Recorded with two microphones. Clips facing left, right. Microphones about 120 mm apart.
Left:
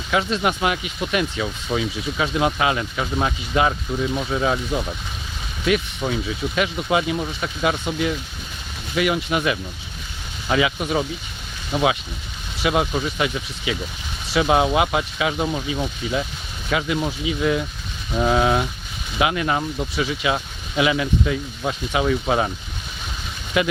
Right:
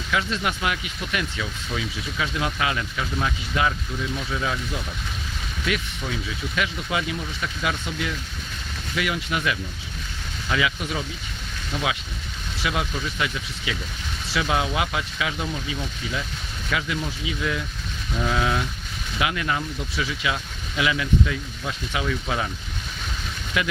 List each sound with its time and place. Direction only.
0.1 s speech: 25° left (ahead or behind)
23.6 s speech: 25° left (ahead or behind)